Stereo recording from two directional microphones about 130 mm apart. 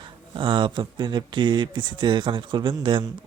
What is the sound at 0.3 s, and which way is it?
Speech, 40° right (ahead or behind).